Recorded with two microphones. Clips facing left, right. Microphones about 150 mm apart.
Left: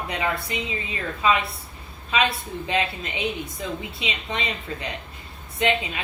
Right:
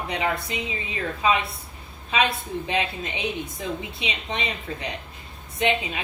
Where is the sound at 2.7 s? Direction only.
20° right (ahead or behind).